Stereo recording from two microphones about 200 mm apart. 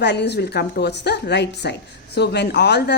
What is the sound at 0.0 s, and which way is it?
Speech, 60° left (ahead or behind).